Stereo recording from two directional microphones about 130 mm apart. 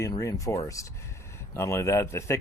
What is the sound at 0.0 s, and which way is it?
Speech, 25° left (ahead or behind).